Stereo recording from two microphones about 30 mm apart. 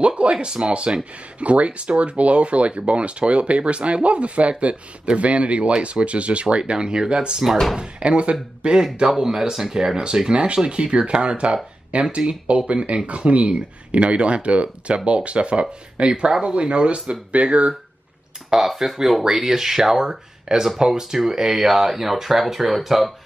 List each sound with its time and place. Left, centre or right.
0.0 s speech: right
1.4 s speech: right
6.6 s speech: right
8.0 s speech: right
9.1 s speech: centre; by 17.2 s right
17.3 s speech: right
18.5 s speech: centre